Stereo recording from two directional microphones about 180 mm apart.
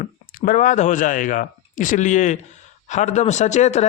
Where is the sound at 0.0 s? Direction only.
50° left (ahead or behind).